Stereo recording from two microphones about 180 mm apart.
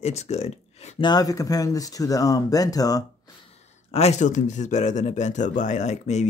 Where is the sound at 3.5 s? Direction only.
35° left (ahead or behind).